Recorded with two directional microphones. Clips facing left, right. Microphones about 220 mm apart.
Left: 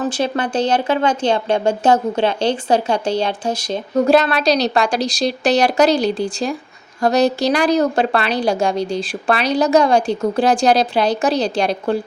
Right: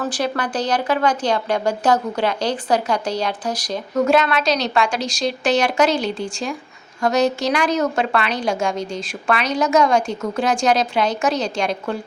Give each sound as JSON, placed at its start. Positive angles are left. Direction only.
{"t": 0.0, "sound": "a woman's voice", "side_deg": 25}